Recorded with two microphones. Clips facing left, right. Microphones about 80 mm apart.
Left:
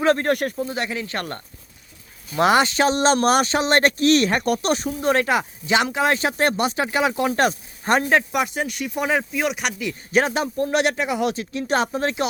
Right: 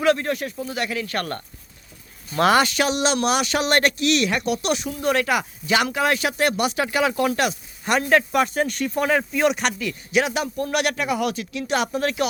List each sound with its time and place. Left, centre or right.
0.0 s speech: left
0.3 s speech: left
0.5 s a man's voice: left
3.5 s a man's voice: left
7.3 s speech: left
8.1 s speech: centre
9.3 s speech: centre
10.1 s a man's voice: left